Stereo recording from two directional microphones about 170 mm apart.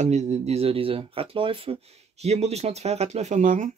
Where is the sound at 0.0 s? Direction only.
40° right (ahead or behind).